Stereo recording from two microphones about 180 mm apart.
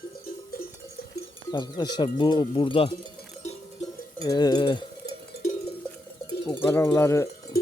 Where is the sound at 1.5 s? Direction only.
25° left (ahead or behind).